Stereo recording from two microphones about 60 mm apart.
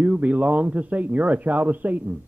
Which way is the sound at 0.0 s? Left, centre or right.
Right.